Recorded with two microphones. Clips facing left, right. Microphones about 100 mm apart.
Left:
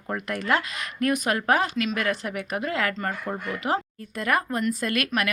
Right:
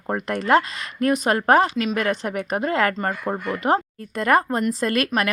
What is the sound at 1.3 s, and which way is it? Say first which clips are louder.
Speech: right 6 dB; 35° right (ahead or behind).